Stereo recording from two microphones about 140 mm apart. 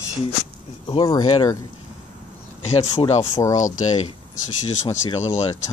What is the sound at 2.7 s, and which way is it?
Speech, 50° left (ahead or behind).